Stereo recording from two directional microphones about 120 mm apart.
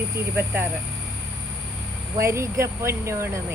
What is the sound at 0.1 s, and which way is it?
Speech, 15° right (ahead or behind).